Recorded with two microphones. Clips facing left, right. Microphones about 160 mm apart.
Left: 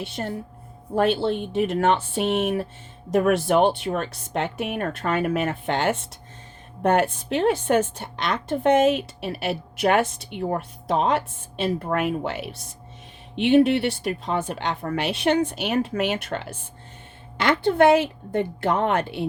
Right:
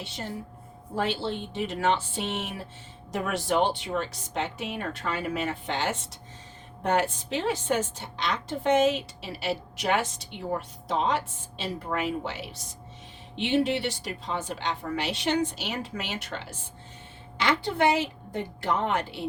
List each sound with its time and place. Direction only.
0.0 s a woman's voice: 60° left (ahead or behind)